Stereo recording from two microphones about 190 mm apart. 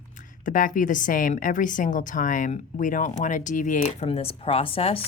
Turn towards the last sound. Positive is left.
turn(degrees=30)  # may be behind; listen again after turning